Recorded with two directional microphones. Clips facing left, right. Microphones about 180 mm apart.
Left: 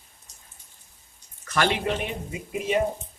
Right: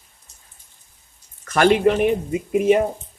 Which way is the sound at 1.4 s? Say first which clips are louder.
Right 9 dB; 50° right (ahead or behind).